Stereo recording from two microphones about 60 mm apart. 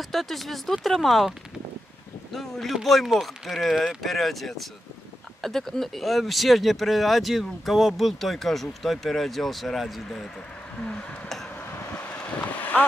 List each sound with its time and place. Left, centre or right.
0.0 s speech: centre
2.3 s speech: centre
10.8 s speech: centre
11.9 s vehicle: left